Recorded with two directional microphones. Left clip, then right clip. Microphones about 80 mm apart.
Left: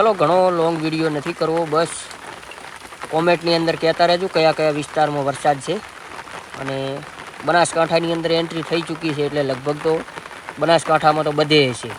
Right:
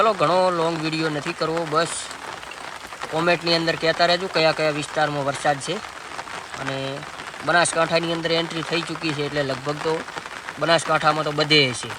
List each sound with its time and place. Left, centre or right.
0.0 s speech: centre
3.2 s speech: centre